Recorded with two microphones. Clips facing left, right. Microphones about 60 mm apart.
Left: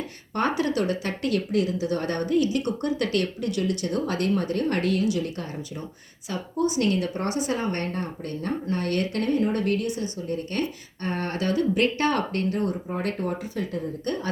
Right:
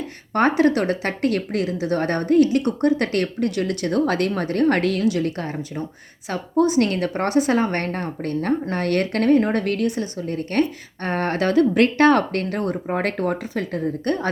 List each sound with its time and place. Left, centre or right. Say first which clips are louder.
0.3 s speech: right 7 dB; right
4.3 s a woman's voice: right 5 dB; right